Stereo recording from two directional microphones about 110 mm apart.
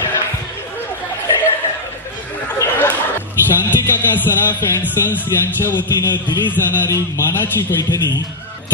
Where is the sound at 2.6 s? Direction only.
20° left (ahead or behind).